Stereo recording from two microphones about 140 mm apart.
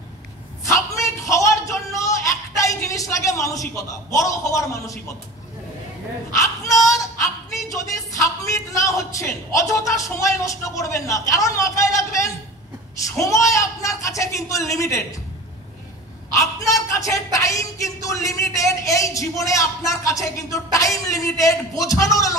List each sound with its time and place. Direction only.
0.7 s a sound: 20° left (ahead or behind)
2.6 s speech: 25° left (ahead or behind)
6.6 s speech: 25° left (ahead or behind)
7.9 s speech: 25° left (ahead or behind)
16.3 s a man's voice: 25° left (ahead or behind)